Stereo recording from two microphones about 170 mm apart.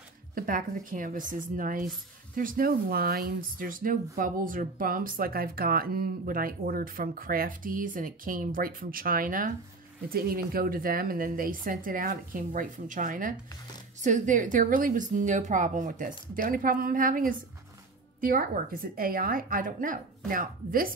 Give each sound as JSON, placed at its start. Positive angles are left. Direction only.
{"t": 0.3, "sound": "a woman's voice", "side_deg": -55}